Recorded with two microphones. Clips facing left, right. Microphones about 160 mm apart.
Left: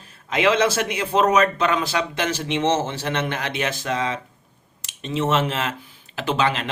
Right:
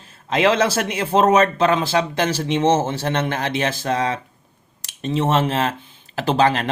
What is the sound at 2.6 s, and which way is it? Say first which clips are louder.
Speech: right 4 dB; 50° right (ahead or behind).